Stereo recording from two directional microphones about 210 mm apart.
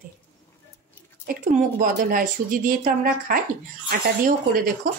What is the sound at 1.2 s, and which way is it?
A woman's voice, 40° right (ahead or behind).